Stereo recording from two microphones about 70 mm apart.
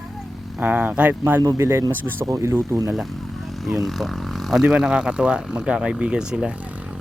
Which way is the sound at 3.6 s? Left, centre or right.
Centre.